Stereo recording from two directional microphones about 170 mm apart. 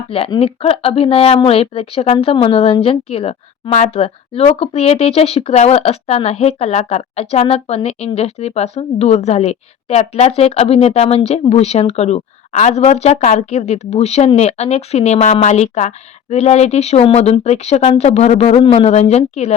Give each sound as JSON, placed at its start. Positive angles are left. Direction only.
{"t": 0.1, "sound": "a woman's voice", "side_deg": 35}